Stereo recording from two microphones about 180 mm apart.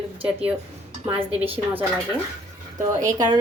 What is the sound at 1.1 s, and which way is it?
Speech, 30° right (ahead or behind).